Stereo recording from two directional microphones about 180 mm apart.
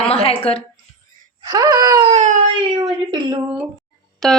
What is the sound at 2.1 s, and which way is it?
Speech, 40° right (ahead or behind).